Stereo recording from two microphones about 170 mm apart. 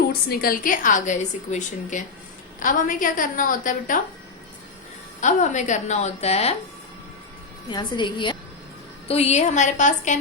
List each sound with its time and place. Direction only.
0.1 s a woman's voice: 60° left (ahead or behind)
5.2 s a woman's voice: 45° left (ahead or behind)
7.7 s a woman's voice: 25° left (ahead or behind); by 10.2 s 45° left (ahead or behind)